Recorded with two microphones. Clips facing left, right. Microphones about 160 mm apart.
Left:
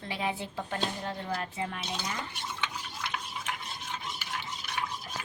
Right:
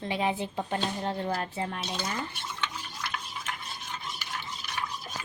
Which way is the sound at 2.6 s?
15° left (ahead or behind).